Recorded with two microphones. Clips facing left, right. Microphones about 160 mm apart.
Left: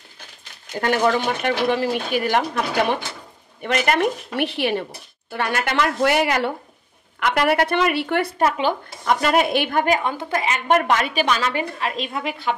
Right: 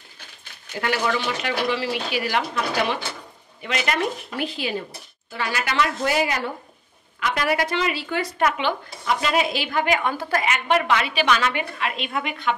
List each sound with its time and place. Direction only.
0.7 s a woman's voice: 45° left (ahead or behind); by 4.8 s 65° left (ahead or behind)
5.3 s a woman's voice: 55° left (ahead or behind)
8.4 s speech: 35° left (ahead or behind); by 9.9 s 50° left (ahead or behind)
9.9 s a woman's voice: 25° left (ahead or behind)
10.7 s a woman's voice: 45° left (ahead or behind)